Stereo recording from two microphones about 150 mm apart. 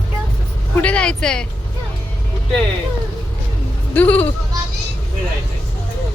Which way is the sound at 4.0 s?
10° left (ahead or behind).